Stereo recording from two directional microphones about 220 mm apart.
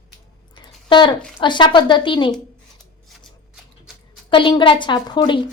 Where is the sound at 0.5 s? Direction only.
20° left (ahead or behind).